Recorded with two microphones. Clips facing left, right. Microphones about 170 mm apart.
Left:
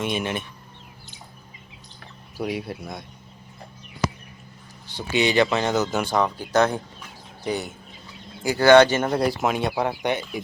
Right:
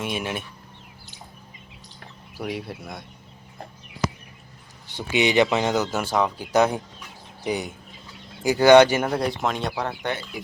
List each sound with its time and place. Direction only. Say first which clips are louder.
0.0 s speech: left 2 dB; 5° right (ahead or behind)
2.5 s speech: right 1 dB; centre (ahead or behind)
4.9 s speech: even; 15° right (ahead or behind)
9.0 s speech: left 2 dB; 5° left (ahead or behind)